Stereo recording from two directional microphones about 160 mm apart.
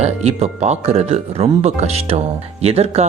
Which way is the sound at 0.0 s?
40° right (ahead or behind).